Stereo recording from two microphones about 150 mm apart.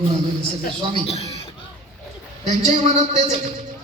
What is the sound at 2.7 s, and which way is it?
Speech, 55° right (ahead or behind).